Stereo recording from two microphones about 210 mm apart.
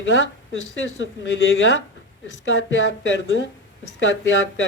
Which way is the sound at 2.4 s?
60° left (ahead or behind).